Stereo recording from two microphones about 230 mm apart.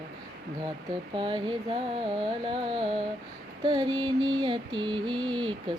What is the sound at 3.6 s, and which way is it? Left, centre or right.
Female singing, centre.